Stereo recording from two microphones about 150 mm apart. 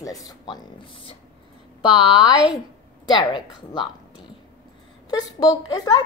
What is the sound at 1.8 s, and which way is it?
A child's voice, 30° left (ahead or behind).